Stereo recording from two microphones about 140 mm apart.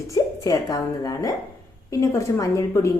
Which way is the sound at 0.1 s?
25° left (ahead or behind).